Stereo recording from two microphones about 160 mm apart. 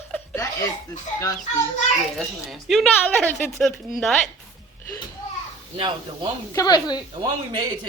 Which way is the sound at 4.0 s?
5° left (ahead or behind).